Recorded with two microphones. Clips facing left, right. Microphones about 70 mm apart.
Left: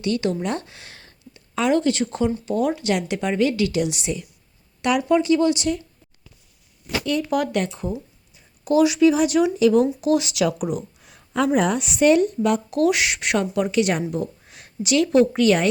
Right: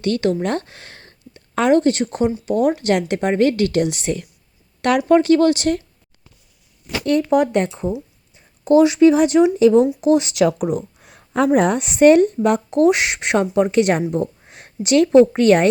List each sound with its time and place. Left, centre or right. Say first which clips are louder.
0.0 s a woman's voice: right 4 dB; right
2.7 s speech: right 4 dB; right
7.0 s speech: right 7 dB; right
7.3 s a woman's voice: right 6 dB; right
11.0 s a woman's voice: right 3 dB; right
14.0 s speech: right 5 dB; right